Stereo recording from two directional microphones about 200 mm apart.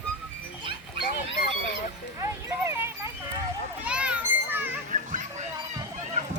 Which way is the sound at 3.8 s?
5° right (ahead or behind).